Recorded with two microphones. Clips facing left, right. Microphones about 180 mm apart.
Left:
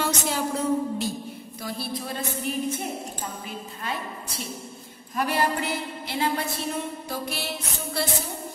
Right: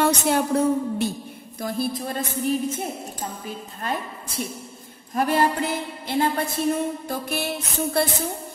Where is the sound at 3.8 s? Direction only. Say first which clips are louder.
Right 4 dB; 50° right (ahead or behind).